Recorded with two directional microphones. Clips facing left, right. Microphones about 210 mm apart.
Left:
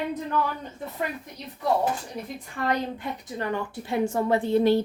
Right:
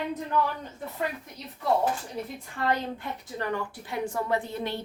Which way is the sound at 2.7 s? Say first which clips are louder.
Left 2 dB; 15° left (ahead or behind).